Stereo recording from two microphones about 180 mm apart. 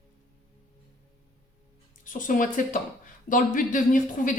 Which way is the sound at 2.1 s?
50° left (ahead or behind).